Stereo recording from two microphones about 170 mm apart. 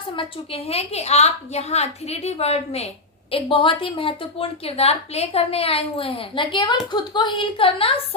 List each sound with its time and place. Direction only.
0.2 s a woman's voice: 35° left (ahead or behind)